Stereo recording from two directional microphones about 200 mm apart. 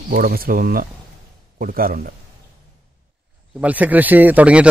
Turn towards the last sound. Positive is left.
turn(degrees=-5)  # may be behind; listen again after turning